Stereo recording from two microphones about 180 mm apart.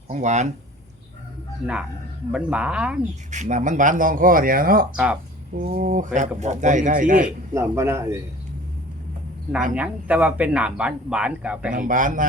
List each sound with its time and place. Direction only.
0.1 s speech: 40° right (ahead or behind)
2.3 s speech: 5° right (ahead or behind)
3.3 s speech: 40° right (ahead or behind)
6.1 s speech: 40° right (ahead or behind)
7.3 s speech: 15° right (ahead or behind)
9.7 s speech: 10° right (ahead or behind)
11.7 s speech: 50° right (ahead or behind)